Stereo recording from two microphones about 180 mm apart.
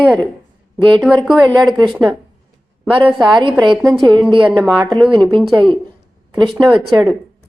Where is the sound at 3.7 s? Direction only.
Centre (ahead or behind).